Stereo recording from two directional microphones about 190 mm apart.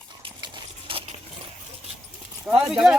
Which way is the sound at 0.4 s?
30° right (ahead or behind).